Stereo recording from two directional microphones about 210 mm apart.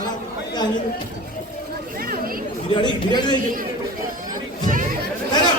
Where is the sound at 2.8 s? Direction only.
20° left (ahead or behind).